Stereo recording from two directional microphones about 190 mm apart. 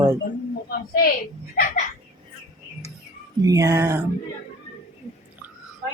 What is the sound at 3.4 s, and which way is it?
Speech, 15° right (ahead or behind).